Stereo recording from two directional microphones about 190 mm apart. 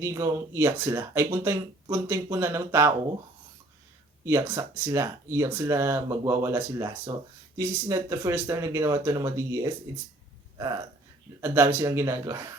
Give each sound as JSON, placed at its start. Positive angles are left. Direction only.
{"t": 0.0, "sound": "speech", "side_deg": -15}
{"t": 4.3, "sound": "speech", "side_deg": -15}
{"t": 11.3, "sound": "speech", "side_deg": -10}